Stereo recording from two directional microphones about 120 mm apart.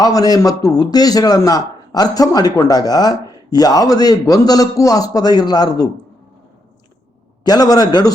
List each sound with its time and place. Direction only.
0.0 s a man's voice: 30° left (ahead or behind)
7.4 s a man's voice: 30° left (ahead or behind)